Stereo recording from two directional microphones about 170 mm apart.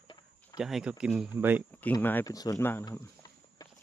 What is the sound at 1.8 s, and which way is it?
Speech, 10° left (ahead or behind).